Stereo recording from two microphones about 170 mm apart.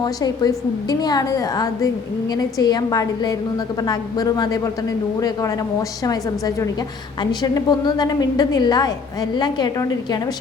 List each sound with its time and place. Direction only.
0.0 s a woman's voice: 20° left (ahead or behind)
6.1 s a woman's voice: 20° left (ahead or behind)